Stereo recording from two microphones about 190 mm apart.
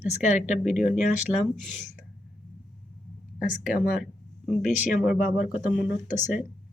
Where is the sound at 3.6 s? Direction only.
5° right (ahead or behind).